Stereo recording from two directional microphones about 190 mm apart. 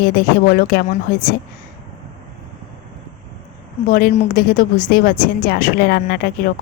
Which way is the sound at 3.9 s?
50° left (ahead or behind).